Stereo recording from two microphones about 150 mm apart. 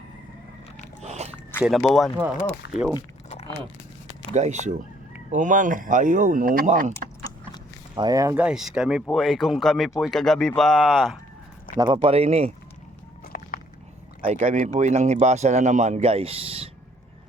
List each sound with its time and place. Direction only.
1.0 s a sound: 45° right (ahead or behind)
1.6 s speech: centre (ahead or behind)
3.2 s a sound: 45° left (ahead or behind)
4.4 s speech: 50° right (ahead or behind)
7.9 s speech: 25° right (ahead or behind)
8.4 s speech: 5° right (ahead or behind)
11.8 s speech: 30° right (ahead or behind)
13.2 s a sound: 75° left (ahead or behind)
14.2 s speech: 50° right (ahead or behind)